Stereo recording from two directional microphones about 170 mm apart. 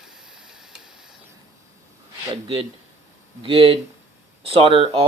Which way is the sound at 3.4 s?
30° right (ahead or behind).